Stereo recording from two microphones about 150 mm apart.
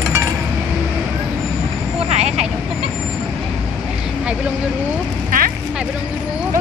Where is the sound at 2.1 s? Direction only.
45° right (ahead or behind).